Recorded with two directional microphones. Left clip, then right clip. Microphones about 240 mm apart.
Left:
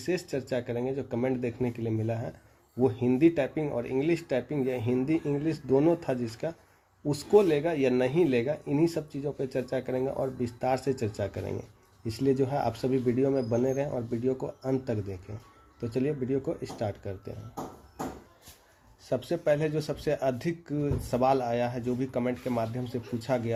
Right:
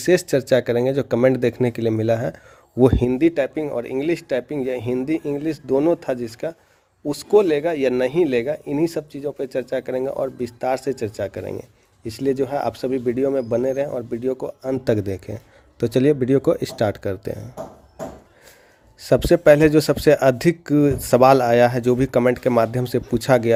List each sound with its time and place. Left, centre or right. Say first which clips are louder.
0.0 s speech: right 14 dB; right
19.0 s speech: right 14 dB; right